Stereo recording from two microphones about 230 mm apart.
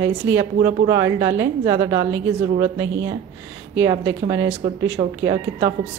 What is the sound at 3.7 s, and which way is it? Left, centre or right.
A woman's voice, centre.